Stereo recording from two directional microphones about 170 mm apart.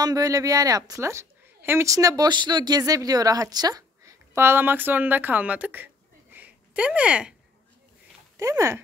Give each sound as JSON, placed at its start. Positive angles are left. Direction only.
{"t": 0.0, "sound": "a woman's voice", "side_deg": -20}
{"t": 6.3, "sound": "a sound", "side_deg": -10}
{"t": 8.4, "sound": "speech", "side_deg": -20}